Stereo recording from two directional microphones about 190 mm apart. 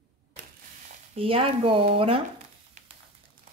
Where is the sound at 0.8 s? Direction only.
30° right (ahead or behind).